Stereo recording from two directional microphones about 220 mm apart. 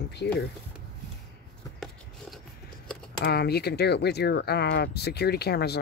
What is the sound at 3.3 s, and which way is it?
Speech, 45° left (ahead or behind).